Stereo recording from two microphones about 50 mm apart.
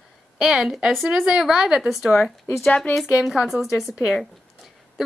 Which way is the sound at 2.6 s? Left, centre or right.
Left.